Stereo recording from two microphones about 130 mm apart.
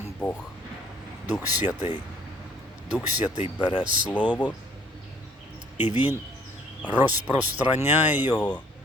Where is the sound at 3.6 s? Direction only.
35° left (ahead or behind).